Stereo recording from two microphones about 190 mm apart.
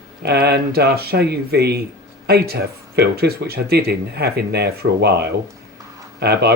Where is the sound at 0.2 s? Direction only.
55° right (ahead or behind).